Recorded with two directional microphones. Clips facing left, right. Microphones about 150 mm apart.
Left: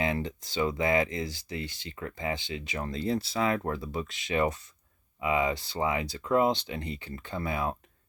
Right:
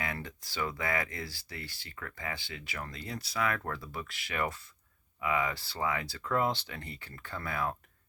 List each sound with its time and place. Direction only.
0.0 s speech: 20° left (ahead or behind)